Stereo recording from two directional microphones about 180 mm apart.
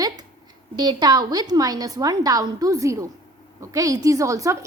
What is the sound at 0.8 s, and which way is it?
A woman's voice, 20° right (ahead or behind).